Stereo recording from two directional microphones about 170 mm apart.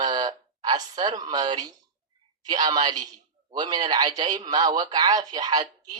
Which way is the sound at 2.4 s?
25° right (ahead or behind).